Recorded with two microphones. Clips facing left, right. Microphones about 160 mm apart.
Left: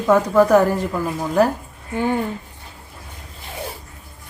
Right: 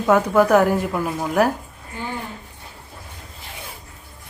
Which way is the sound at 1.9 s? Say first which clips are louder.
Left 10 dB; 55° left (ahead or behind).